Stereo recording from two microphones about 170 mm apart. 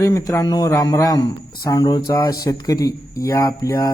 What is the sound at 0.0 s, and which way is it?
Speech, 20° left (ahead or behind).